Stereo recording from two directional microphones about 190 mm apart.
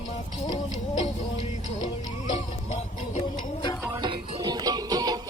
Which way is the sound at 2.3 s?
35° left (ahead or behind).